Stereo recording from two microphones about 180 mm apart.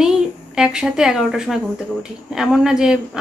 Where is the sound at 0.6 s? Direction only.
5° right (ahead or behind).